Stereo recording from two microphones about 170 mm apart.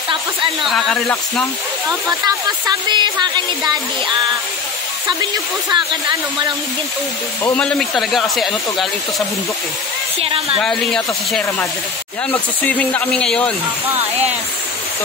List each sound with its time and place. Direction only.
0.7 s speech: centre (ahead or behind)
1.9 s speech: 20° right (ahead or behind)
5.7 s speech: 25° right (ahead or behind)
7.4 s speech: 5° left (ahead or behind)
10.2 s speech: 35° right (ahead or behind)
10.6 s speech: 5° left (ahead or behind)